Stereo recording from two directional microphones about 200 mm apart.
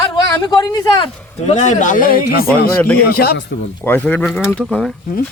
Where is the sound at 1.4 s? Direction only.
35° left (ahead or behind).